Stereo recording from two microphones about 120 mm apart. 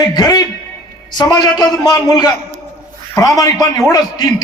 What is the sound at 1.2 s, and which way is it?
A man's voice, 30° left (ahead or behind).